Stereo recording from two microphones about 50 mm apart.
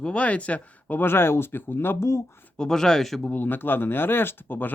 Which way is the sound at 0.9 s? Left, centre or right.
Left.